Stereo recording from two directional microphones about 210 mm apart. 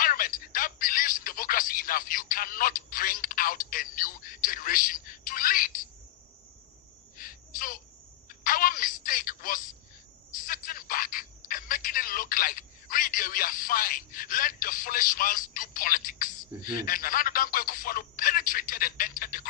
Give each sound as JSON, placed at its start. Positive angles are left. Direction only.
{"t": 0.0, "sound": "speech", "side_deg": 40}
{"t": 7.2, "sound": "a sound", "side_deg": 40}
{"t": 8.4, "sound": "speech", "side_deg": 40}